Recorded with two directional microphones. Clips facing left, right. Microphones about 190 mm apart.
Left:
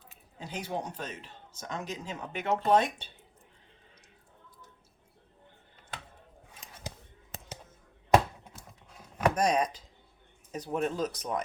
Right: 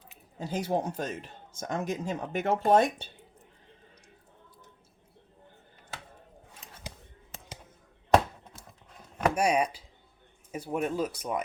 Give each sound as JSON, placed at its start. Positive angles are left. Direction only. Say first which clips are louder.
{"t": 0.3, "sound": "speech", "louder": "right 6 dB", "side_deg": -40}
{"t": 8.1, "sound": "chopping", "louder": "right 1 dB", "side_deg": 5}
{"t": 9.1, "sound": "speech", "louder": "right 1 dB", "side_deg": -10}